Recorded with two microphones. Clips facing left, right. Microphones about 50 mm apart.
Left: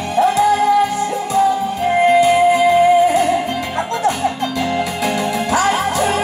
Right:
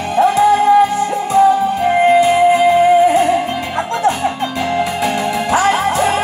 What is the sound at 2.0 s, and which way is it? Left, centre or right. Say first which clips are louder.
Music: right 1 dB; right.